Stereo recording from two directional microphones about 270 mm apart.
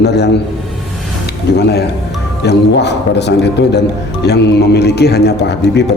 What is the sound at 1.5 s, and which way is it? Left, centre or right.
A man's voice, left.